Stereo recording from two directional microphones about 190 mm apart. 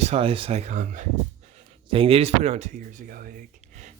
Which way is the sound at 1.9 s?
30° right (ahead or behind).